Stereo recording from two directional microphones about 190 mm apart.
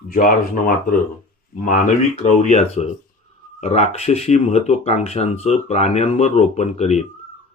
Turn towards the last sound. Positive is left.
turn(degrees=35)  # may be behind; listen again after turning